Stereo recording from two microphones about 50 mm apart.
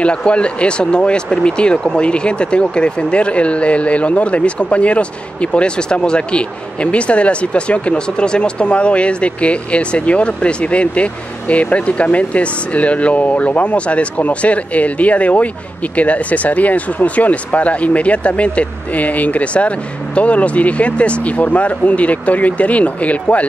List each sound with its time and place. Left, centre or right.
0.0 s speech: left